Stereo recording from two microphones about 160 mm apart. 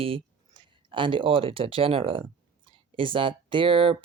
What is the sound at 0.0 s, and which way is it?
Speech, 35° right (ahead or behind).